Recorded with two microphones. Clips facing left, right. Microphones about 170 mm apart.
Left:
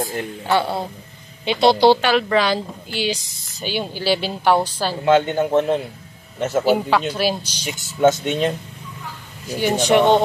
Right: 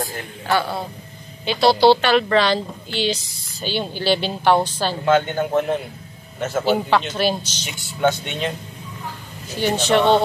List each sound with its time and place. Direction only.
0.0 s speech: 25° left (ahead or behind); by 4.9 s 5° left (ahead or behind)
5.3 s speech: 20° left (ahead or behind)
8.3 s speech: 40° left (ahead or behind)
9.6 s speech: 15° left (ahead or behind)